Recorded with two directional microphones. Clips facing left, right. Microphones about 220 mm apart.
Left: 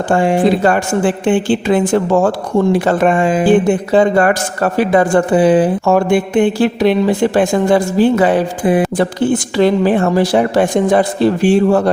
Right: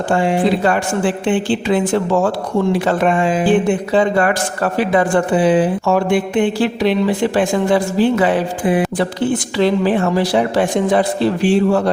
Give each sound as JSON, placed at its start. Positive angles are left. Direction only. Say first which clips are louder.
{"t": 0.1, "sound": "speech", "louder": "left 3 dB", "side_deg": 50}